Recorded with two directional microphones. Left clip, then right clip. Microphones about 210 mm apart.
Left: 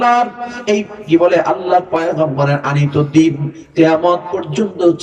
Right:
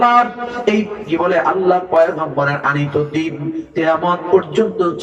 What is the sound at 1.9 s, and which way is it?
Speech, 50° left (ahead or behind).